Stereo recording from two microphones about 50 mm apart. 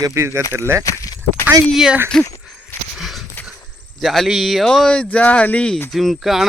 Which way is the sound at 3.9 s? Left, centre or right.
Centre.